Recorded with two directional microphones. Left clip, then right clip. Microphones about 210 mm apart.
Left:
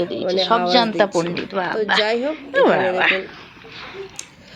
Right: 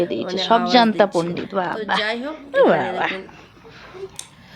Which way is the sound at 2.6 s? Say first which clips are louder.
Left 1 dB; 15° right (ahead or behind).